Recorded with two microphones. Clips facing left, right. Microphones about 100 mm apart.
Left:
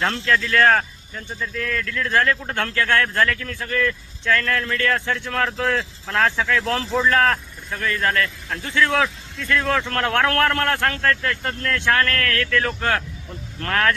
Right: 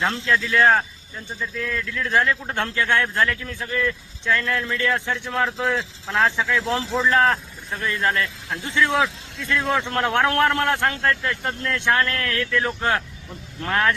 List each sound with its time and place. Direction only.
0.0 s speech: centre (ahead or behind)
5.5 s speech: 5° right (ahead or behind)